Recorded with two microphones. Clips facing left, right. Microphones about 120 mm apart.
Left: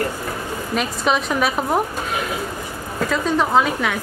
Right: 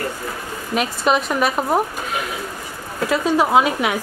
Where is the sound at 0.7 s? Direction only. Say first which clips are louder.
Right 2 dB; 5° right (ahead or behind).